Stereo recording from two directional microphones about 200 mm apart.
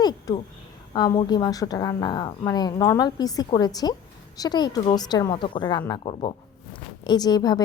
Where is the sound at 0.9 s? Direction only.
20° left (ahead or behind).